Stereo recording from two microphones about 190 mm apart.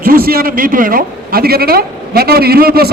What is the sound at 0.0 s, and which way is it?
A man's voice, 50° right (ahead or behind).